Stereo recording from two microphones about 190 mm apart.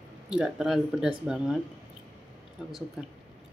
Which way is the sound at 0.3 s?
5° right (ahead or behind).